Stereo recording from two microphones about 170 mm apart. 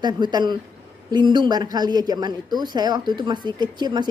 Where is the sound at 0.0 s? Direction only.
25° right (ahead or behind).